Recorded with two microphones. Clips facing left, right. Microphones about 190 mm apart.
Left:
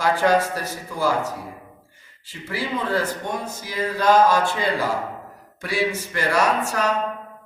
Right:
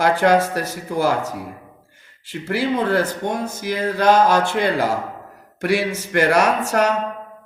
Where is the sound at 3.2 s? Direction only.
70° right (ahead or behind).